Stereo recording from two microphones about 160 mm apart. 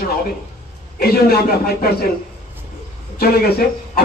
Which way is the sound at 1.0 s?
75° left (ahead or behind).